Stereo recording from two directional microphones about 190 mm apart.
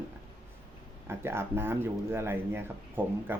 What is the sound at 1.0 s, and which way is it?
Speech, 10° right (ahead or behind).